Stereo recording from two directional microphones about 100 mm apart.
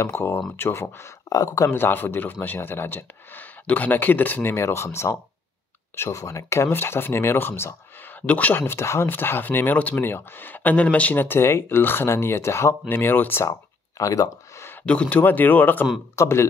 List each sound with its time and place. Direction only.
0.6 s speech: 25° left (ahead or behind)
1.7 s speech: 20° left (ahead or behind)
13.5 s a sound: 35° left (ahead or behind)
14.7 s speech: 15° left (ahead or behind)